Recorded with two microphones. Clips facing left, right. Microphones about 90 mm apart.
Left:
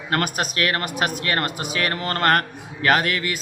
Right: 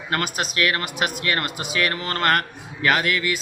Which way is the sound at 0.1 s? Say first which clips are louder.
Left 2 dB; 40° left (ahead or behind).